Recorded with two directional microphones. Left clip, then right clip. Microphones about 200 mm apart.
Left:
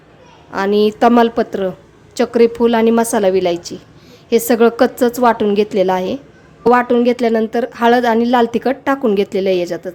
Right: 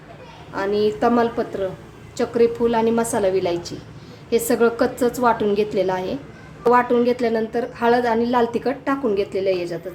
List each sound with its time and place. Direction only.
0.5 s a woman's voice: 45° left (ahead or behind)